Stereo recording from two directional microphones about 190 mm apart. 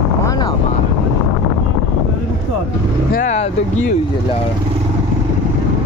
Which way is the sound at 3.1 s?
40° left (ahead or behind).